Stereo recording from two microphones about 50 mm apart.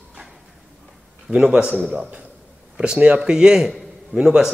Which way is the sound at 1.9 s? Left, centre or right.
Right.